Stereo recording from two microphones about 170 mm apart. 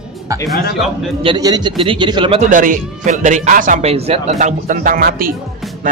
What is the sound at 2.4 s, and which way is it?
Speech, 50° right (ahead or behind).